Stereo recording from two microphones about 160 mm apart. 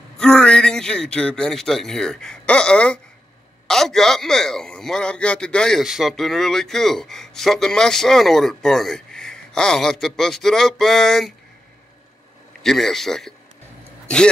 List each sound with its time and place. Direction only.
0.2 s a man's voice: 5° left (ahead or behind)
12.6 s a man's voice: centre (ahead or behind)